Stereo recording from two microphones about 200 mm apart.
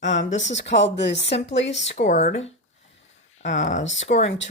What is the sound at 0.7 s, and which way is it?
Speech, 60° left (ahead or behind).